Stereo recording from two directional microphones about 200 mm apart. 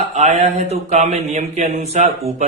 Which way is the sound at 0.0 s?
35° right (ahead or behind).